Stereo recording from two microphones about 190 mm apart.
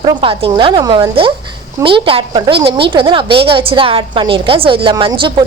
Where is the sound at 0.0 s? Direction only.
25° right (ahead or behind).